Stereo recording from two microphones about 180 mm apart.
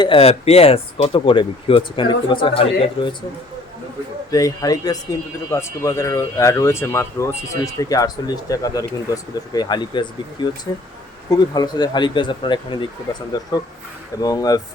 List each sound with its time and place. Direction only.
0.0 s speech: 30° left (ahead or behind)
4.3 s speech: 20° left (ahead or behind)
14.2 s speech: 20° left (ahead or behind)